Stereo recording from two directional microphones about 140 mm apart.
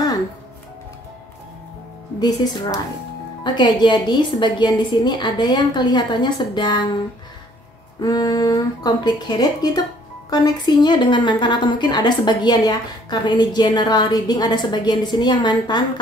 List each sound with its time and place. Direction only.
2.1 s a woman's voice: 30° left (ahead or behind)
8.0 s a woman's voice: 30° left (ahead or behind)